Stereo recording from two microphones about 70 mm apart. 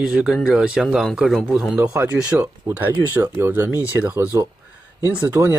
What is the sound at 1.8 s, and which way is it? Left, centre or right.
Speech, right.